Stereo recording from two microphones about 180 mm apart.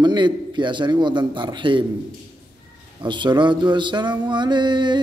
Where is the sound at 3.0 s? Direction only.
25° right (ahead or behind).